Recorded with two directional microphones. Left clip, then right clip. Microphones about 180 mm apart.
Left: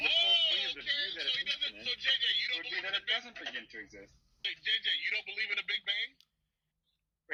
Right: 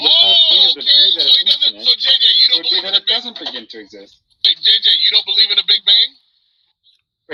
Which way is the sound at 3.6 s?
45° right (ahead or behind).